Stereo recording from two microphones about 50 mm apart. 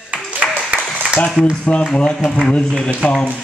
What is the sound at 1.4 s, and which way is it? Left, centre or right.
Speech, centre.